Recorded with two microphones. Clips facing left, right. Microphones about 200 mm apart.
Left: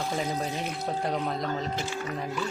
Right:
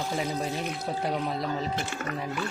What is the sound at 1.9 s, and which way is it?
Speech, 55° right (ahead or behind).